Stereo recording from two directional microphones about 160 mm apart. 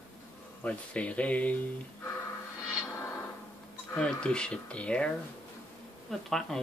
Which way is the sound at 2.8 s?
15° left (ahead or behind).